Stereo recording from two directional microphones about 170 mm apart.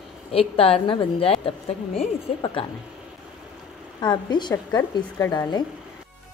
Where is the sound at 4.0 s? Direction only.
25° left (ahead or behind).